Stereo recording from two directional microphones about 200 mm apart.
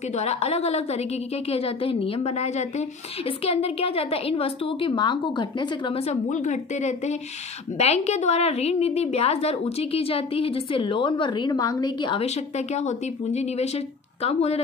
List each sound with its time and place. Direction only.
0.1 s a woman's voice: 30° left (ahead or behind)